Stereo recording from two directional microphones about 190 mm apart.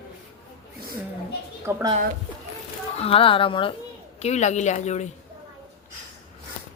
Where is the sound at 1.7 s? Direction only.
20° right (ahead or behind).